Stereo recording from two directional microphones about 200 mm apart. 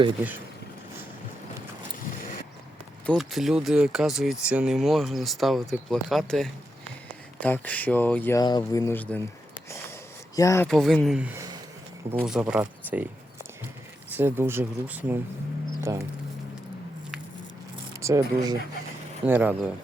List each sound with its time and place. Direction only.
3.1 s speech: centre (ahead or behind)
10.3 s speech: 15° left (ahead or behind)
10.7 s speech: centre (ahead or behind)
14.1 s speech: 10° right (ahead or behind)
18.0 s speech: 15° right (ahead or behind)